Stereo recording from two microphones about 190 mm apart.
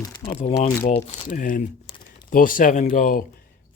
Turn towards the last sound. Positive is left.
turn(degrees=45)  # may be behind; listen again after turning